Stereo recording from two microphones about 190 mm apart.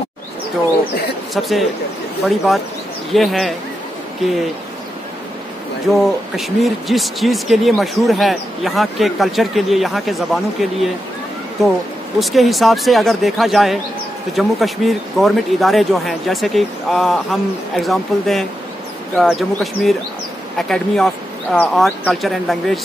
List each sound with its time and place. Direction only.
1.3 s speech: centre (ahead or behind)
5.9 s speech: centre (ahead or behind)
12.2 s speech: centre (ahead or behind)